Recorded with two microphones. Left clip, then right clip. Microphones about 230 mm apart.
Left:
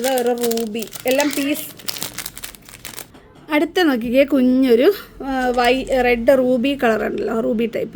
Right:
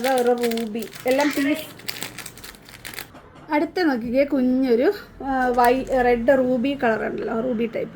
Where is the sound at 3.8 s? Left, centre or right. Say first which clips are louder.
Left 5 dB; left.